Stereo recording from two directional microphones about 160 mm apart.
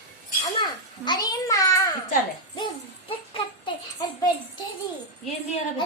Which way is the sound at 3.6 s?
25° left (ahead or behind).